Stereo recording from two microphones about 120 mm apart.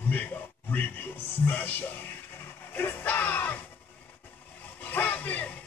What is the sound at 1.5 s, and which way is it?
Speech, 15° left (ahead or behind).